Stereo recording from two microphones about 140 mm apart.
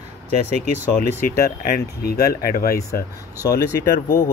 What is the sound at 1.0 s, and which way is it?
Speech, 90° left.